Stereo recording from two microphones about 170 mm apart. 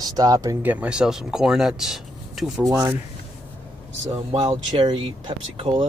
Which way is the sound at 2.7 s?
20° right (ahead or behind).